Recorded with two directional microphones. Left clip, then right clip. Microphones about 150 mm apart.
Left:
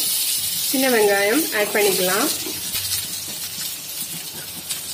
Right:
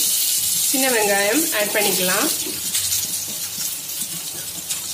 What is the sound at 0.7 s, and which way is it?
Speech, 35° left (ahead or behind).